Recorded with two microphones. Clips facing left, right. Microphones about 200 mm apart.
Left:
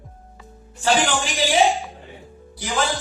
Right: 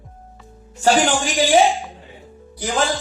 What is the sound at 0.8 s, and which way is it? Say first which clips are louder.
Music: right 4 dB; 40° right (ahead or behind).